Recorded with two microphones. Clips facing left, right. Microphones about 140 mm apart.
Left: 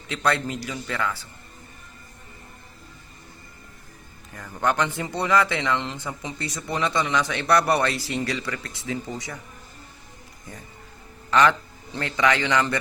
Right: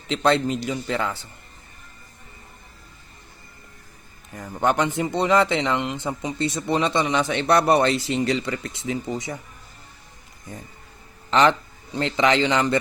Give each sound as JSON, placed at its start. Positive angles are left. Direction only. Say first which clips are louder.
{"t": 0.1, "sound": "speech", "louder": "right 5 dB", "side_deg": -25}
{"t": 4.4, "sound": "speech", "louder": "right 2 dB", "side_deg": -20}
{"t": 11.3, "sound": "speech", "louder": "right 1 dB", "side_deg": -25}